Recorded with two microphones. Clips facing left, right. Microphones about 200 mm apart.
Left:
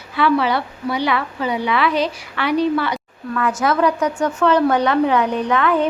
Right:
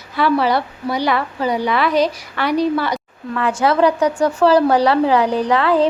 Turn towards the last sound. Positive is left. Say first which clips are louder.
# right 2 dB
turn(degrees=-35)  # may be behind; listen again after turning